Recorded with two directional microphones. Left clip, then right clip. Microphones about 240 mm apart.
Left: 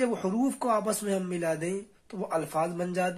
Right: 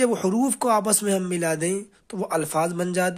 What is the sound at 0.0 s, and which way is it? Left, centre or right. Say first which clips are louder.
Speech: right 6 dB; right.